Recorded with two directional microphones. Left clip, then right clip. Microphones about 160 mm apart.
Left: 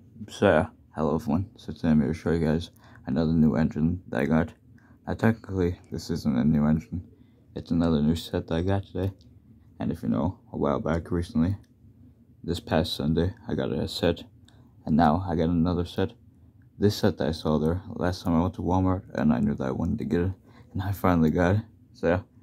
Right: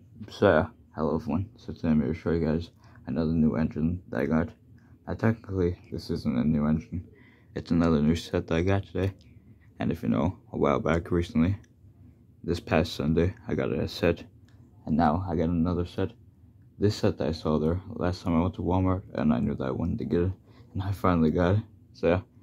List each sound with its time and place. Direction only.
0.2 s speech: 20° left (ahead or behind)
7.5 s speech: 5° left (ahead or behind)
14.9 s speech: 35° left (ahead or behind); by 22.3 s 10° left (ahead or behind)